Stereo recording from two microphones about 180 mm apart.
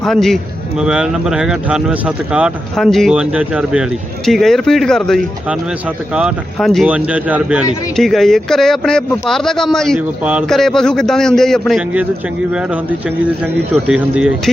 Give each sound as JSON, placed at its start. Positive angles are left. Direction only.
{"t": 0.0, "sound": "speech", "side_deg": 0}
{"t": 13.8, "sound": "speech", "side_deg": -5}